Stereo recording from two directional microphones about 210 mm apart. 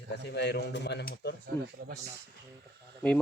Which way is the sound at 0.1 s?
55° left (ahead or behind).